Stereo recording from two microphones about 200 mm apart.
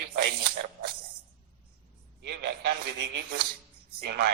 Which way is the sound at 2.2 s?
55° right (ahead or behind).